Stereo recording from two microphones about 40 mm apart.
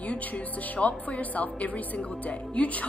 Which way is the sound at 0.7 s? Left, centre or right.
Left.